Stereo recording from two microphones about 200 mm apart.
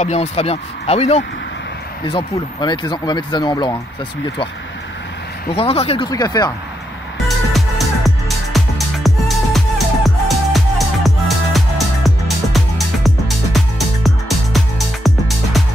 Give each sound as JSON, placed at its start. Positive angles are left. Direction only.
{"t": 0.0, "sound": "speech", "side_deg": 35}
{"t": 2.3, "sound": "speech", "side_deg": 20}
{"t": 5.5, "sound": "speech", "side_deg": 30}
{"t": 7.5, "sound": "music", "side_deg": 0}